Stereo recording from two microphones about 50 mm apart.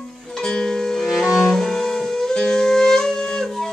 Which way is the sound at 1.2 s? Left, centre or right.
Centre.